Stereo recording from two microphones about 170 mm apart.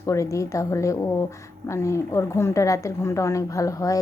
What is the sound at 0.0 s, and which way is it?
A woman's voice, 20° left (ahead or behind).